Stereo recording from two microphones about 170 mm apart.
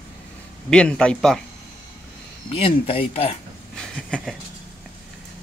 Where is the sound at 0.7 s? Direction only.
5° left (ahead or behind).